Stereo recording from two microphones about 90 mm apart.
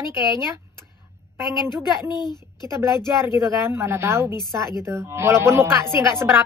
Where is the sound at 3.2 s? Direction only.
30° right (ahead or behind).